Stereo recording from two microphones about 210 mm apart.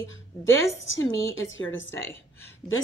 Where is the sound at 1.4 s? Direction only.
65° left (ahead or behind).